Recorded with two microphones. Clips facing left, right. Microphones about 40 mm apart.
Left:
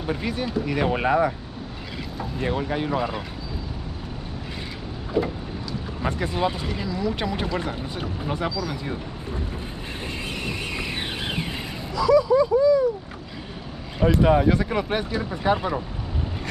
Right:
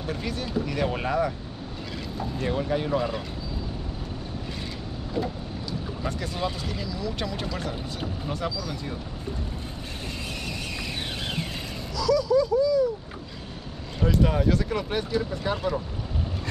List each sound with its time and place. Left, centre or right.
0.0 s speech: centre
2.3 s speech: centre
5.2 s speech: centre
6.0 s speech: left
10.4 s vehicle: left
11.9 s speech: left
13.9 s speech: left